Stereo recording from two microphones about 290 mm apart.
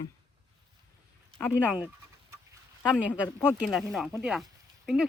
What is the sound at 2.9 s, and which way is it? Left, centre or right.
Speech, centre.